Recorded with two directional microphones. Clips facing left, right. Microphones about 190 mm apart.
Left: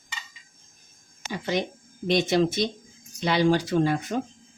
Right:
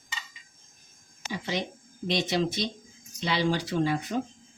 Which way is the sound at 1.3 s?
50° left (ahead or behind).